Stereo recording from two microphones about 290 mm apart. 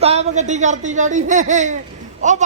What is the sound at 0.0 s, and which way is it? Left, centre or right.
A man's voice, right.